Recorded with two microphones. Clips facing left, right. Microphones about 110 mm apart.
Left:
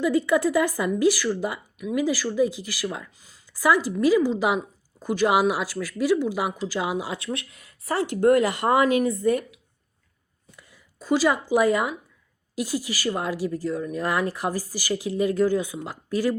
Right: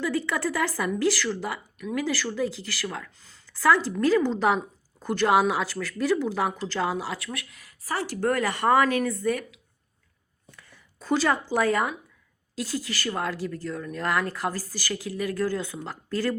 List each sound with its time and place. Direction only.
0.0 s speech: 15° left (ahead or behind)
10.6 s speech: 5° left (ahead or behind)